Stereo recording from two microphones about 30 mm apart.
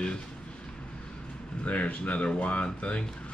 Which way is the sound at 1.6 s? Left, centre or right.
Left.